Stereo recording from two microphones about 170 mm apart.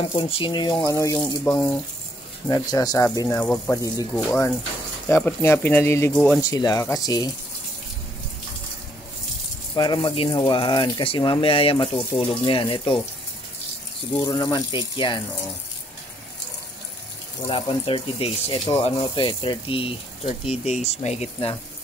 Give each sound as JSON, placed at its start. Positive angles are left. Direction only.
{"t": 0.0, "sound": "speech", "side_deg": 30}
{"t": 3.3, "sound": "speech", "side_deg": 5}
{"t": 6.1, "sound": "speech", "side_deg": 5}
{"t": 6.5, "sound": "speech", "side_deg": 20}
{"t": 9.8, "sound": "speech", "side_deg": 25}
{"t": 14.2, "sound": "speech", "side_deg": 25}
{"t": 17.5, "sound": "speech", "side_deg": 30}